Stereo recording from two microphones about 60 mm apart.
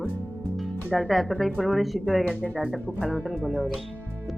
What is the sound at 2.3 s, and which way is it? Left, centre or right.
Speech, left.